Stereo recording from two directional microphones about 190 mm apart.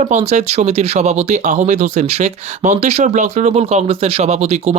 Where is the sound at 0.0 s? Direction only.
40° right (ahead or behind).